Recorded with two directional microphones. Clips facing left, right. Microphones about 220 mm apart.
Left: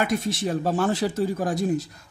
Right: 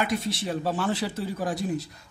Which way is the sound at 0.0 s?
45° left (ahead or behind).